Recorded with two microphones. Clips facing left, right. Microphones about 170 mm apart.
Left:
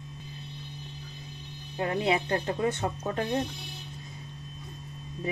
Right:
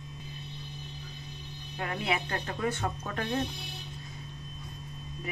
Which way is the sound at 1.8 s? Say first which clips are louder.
Left 5 dB; 25° left (ahead or behind).